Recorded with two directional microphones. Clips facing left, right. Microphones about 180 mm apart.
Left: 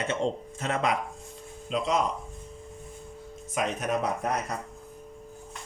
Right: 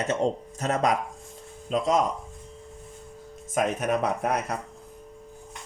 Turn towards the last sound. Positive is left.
turn(degrees=-60)  # may be behind; listen again after turning